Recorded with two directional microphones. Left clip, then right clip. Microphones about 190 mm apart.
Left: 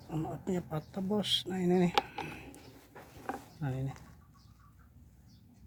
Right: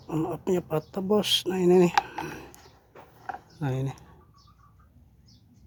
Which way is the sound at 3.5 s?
55° right (ahead or behind).